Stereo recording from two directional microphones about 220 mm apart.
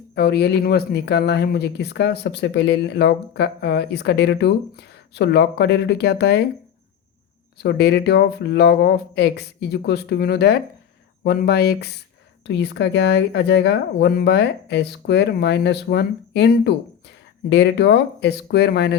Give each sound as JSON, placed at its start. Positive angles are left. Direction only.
{"t": 0.1, "sound": "speech", "side_deg": 50}
{"t": 7.6, "sound": "speech", "side_deg": 50}